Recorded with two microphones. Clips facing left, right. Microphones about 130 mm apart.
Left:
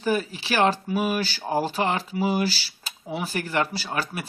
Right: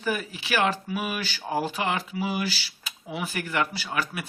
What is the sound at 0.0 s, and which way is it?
Speech, 30° left (ahead or behind).